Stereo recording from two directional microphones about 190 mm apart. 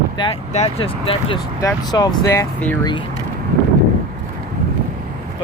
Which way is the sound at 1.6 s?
20° left (ahead or behind).